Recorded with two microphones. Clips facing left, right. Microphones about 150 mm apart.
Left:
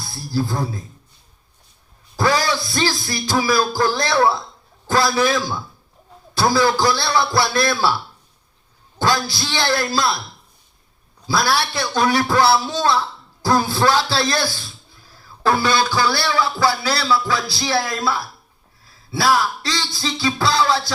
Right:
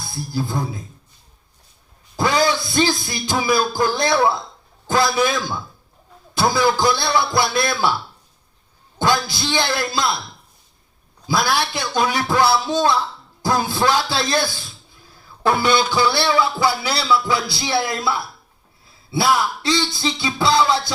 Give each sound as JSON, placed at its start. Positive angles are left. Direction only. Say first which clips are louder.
{"t": 0.1, "sound": "speech", "louder": "left 2 dB", "side_deg": -20}
{"t": 2.1, "sound": "music", "louder": "right 1 dB", "side_deg": -20}
{"t": 4.9, "sound": "a man's voice", "louder": "even", "side_deg": -20}
{"t": 6.5, "sound": "a man's voice", "louder": "left 1 dB", "side_deg": -20}
{"t": 9.0, "sound": "a man's voice", "louder": "even", "side_deg": -20}
{"t": 11.3, "sound": "a man's voice", "louder": "even", "side_deg": -15}
{"t": 15.4, "sound": "a man's voice", "louder": "even", "side_deg": -20}